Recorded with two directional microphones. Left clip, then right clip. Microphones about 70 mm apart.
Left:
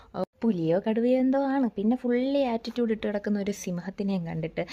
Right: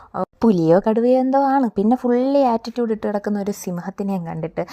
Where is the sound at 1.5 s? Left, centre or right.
Right.